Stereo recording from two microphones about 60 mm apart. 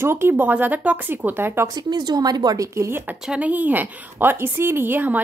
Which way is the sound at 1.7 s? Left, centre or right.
Right.